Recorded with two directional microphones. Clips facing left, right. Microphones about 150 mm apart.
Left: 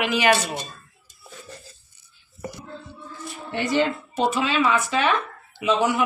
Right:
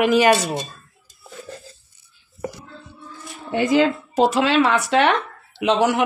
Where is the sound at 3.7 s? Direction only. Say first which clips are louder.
Right 5 dB; 90° right.